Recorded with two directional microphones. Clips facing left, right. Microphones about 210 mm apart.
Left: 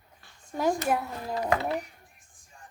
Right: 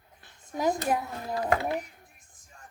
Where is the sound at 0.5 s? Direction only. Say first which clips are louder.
Left 1 dB; 15° right (ahead or behind).